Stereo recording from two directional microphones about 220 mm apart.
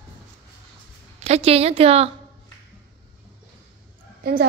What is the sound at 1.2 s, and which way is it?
Speech, 30° right (ahead or behind).